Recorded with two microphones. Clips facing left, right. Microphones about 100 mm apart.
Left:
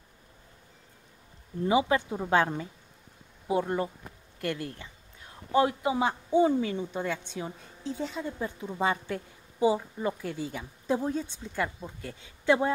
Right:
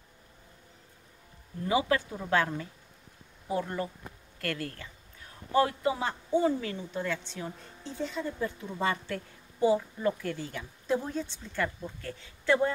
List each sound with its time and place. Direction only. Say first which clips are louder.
1.6 s speech: left 3 dB; 20° left (ahead or behind)
7.8 s a woman's voice: left 2 dB; centre (ahead or behind)
8.2 s speech: right 1 dB; 20° left (ahead or behind)